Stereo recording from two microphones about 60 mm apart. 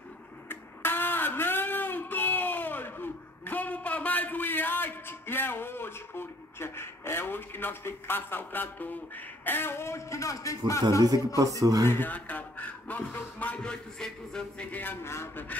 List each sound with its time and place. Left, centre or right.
0.5 s a sound: left
11.6 s speech: right
11.9 s a man's voice: left
13.6 s music: centre
14.7 s speech: left